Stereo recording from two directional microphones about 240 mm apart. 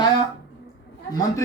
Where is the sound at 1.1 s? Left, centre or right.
Centre.